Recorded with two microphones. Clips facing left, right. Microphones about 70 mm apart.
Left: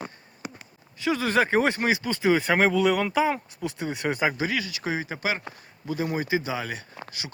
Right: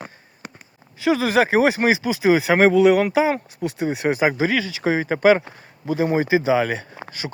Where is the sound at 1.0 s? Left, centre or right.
Right.